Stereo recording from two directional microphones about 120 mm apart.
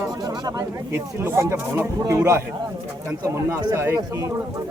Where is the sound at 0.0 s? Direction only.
30° right (ahead or behind).